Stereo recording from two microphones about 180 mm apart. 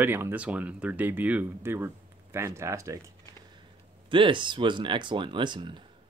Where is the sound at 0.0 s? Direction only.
10° right (ahead or behind).